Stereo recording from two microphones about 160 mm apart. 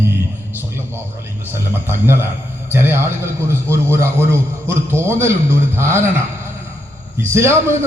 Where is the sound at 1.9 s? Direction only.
15° right (ahead or behind).